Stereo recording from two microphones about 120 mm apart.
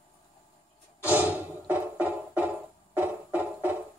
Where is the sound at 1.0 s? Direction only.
15° right (ahead or behind).